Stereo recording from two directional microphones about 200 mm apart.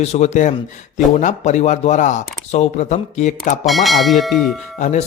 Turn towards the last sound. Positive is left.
turn(degrees=35)  # may be behind; listen again after turning